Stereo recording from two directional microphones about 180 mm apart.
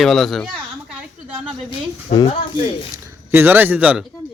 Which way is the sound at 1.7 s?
25° left (ahead or behind).